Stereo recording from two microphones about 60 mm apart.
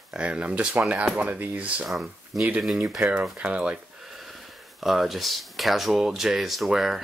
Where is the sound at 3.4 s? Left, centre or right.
Right.